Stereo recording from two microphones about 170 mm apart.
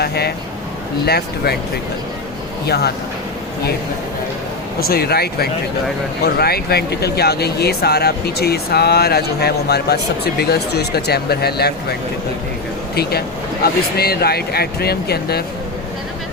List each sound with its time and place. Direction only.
0.0 s speech: 70° left (ahead or behind)
2.6 s speech: 70° left (ahead or behind)
4.8 s speech: 65° left (ahead or behind)
13.0 s speech: 65° left (ahead or behind)